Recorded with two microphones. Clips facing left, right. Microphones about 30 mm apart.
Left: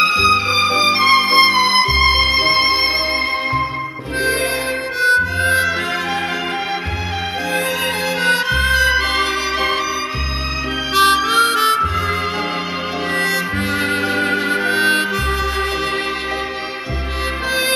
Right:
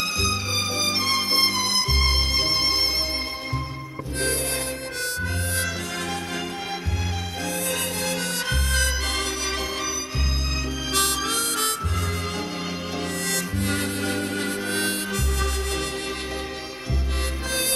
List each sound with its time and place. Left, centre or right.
0.0 s music: left
5.0 s music: left
8.9 s music: left
11.0 s harmonica: left
13.1 s music: left